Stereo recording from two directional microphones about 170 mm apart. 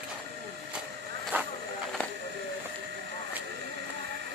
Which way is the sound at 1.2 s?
10° right (ahead or behind).